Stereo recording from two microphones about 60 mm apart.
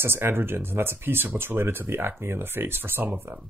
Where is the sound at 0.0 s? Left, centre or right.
Right.